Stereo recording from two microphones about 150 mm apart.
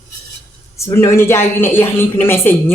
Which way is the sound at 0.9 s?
15° left (ahead or behind).